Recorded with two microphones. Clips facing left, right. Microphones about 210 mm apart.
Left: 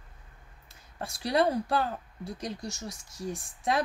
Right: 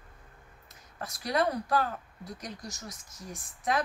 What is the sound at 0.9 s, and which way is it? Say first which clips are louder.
Speech: left 3 dB; 30° left (ahead or behind).